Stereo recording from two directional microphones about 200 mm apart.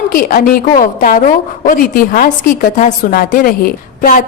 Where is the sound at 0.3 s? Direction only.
45° left (ahead or behind).